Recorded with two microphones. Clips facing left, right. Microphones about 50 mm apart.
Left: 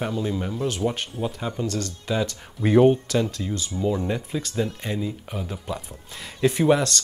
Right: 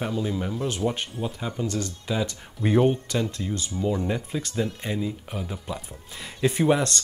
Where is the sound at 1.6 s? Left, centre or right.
Right.